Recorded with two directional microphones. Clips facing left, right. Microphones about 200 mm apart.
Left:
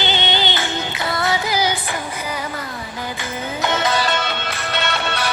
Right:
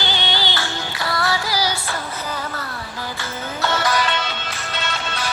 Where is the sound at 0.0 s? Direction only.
20° left (ahead or behind).